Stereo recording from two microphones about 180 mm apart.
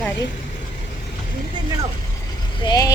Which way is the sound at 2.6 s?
20° left (ahead or behind).